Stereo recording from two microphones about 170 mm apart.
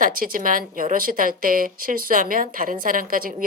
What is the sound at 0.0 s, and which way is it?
Speech, 55° right (ahead or behind).